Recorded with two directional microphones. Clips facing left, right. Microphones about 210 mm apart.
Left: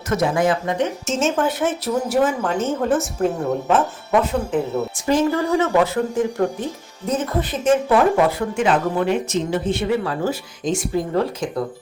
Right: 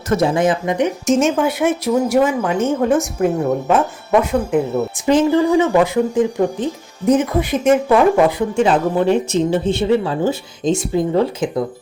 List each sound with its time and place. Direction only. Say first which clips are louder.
0.1 s speech: right 3 dB; 30° right (ahead or behind); by 2.6 s 10° right (ahead or behind)
2.6 s a woman's voice: right 4 dB; centre (ahead or behind)
3.0 s speech: right 4 dB; 10° right (ahead or behind)
8.5 s speech: right 4 dB; 30° right (ahead or behind)